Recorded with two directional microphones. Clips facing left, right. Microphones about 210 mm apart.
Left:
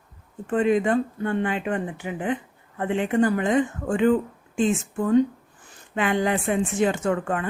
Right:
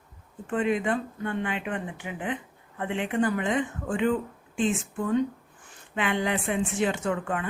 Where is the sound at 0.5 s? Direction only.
40° left (ahead or behind).